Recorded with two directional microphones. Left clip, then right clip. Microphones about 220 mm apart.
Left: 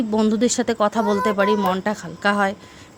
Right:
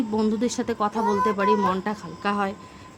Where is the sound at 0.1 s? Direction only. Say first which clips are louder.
Left 8 dB; 30° left (ahead or behind).